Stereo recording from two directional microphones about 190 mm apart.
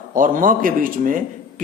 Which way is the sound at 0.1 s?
45° right (ahead or behind).